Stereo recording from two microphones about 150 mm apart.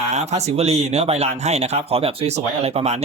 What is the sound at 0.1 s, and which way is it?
Speech, 50° right (ahead or behind).